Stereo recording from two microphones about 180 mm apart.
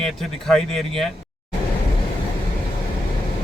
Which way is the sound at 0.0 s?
5° left (ahead or behind).